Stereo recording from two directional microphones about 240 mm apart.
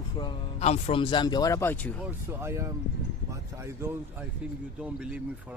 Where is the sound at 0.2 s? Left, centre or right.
Left; by 2.0 s centre.